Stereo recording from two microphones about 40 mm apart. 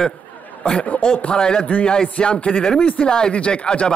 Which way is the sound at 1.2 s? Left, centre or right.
Left.